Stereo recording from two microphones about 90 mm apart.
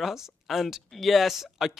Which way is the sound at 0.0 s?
5° right (ahead or behind).